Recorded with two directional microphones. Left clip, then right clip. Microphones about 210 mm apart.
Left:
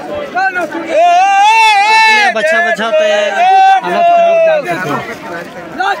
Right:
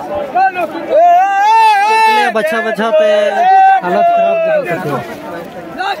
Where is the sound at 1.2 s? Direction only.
25° right (ahead or behind).